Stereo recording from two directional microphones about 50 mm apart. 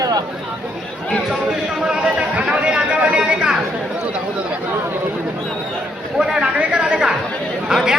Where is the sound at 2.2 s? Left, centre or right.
Right.